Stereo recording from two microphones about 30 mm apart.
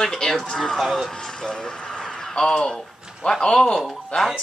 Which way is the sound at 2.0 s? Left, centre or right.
Centre.